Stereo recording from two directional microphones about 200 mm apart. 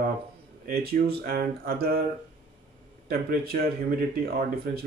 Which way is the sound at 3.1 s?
50° right (ahead or behind).